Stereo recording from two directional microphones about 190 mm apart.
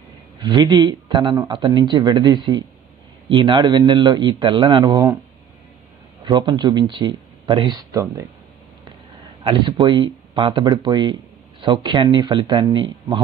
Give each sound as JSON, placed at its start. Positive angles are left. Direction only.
{"t": 0.4, "sound": "speech", "side_deg": -25}
{"t": 6.2, "sound": "speech", "side_deg": -25}
{"t": 9.4, "sound": "speech", "side_deg": -25}